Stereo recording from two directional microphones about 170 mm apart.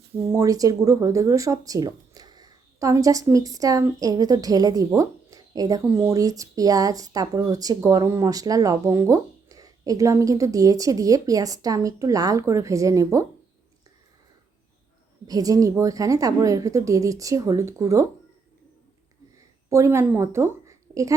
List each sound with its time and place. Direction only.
0.3 s speech: 15° right (ahead or behind)
15.3 s speech: 20° right (ahead or behind)
19.7 s a woman's voice: 15° right (ahead or behind)